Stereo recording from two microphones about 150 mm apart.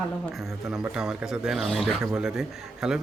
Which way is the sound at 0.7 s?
5° right (ahead or behind).